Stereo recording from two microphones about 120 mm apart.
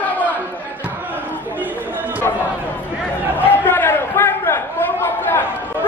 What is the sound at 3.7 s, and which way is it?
Chatter, 15° left (ahead or behind).